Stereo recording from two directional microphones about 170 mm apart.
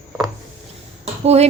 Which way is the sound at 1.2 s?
40° right (ahead or behind).